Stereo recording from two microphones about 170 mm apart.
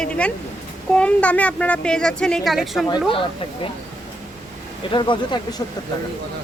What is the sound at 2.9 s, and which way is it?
Speech, 25° left (ahead or behind).